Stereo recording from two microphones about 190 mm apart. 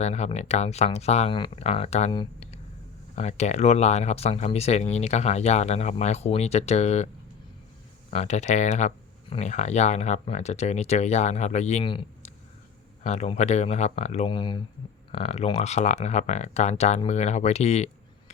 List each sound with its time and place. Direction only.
0.0 s speech: 35° left (ahead or behind)
8.1 s speech: 35° left (ahead or behind)